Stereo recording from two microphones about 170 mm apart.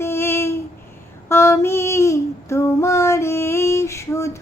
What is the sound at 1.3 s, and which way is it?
Female singing, 15° left (ahead or behind).